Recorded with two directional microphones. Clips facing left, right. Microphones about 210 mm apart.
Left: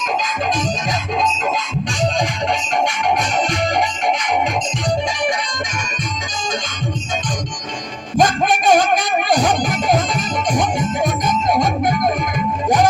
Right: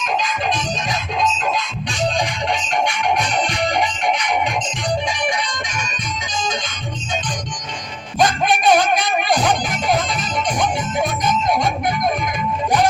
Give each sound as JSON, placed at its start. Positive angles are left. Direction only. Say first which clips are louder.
{"t": 3.5, "sound": "music", "louder": "left 1 dB", "side_deg": 40}
{"t": 8.2, "sound": "music", "louder": "left 1 dB", "side_deg": 45}